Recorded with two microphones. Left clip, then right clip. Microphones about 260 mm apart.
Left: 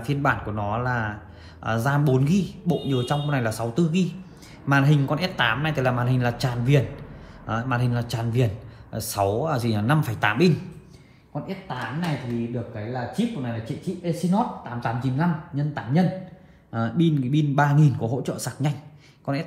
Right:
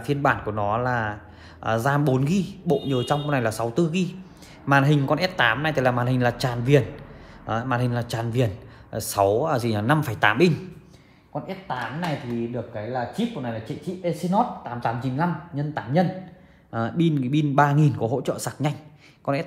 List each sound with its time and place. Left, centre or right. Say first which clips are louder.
0.0 s speech: right 2 dB; right